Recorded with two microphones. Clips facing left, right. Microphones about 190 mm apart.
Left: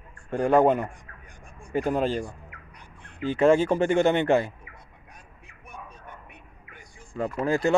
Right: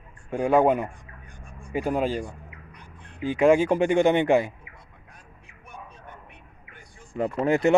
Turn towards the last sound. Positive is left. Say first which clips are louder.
# right 3 dB
turn(degrees=-20)  # may be behind; listen again after turning